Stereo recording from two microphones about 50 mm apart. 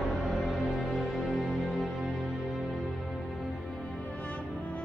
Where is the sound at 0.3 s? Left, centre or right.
Centre.